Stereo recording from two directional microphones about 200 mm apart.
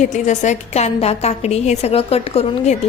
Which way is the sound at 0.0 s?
35° left (ahead or behind).